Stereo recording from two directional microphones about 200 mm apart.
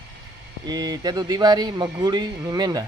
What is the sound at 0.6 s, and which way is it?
Speech, 20° right (ahead or behind).